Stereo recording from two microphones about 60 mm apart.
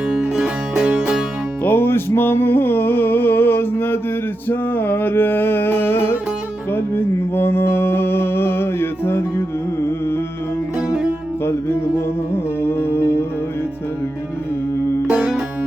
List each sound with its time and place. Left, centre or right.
0.1 s music: centre
1.6 s music: left
6.7 s mantra: left
11.4 s music: left
15.1 s music: centre